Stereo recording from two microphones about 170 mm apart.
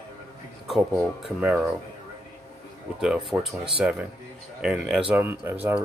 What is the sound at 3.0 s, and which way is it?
Speech, 5° right (ahead or behind).